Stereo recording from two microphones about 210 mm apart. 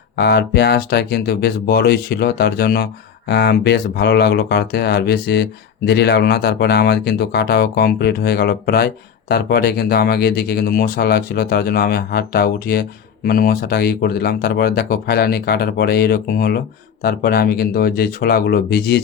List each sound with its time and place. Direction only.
0.2 s speech: 50° left (ahead or behind)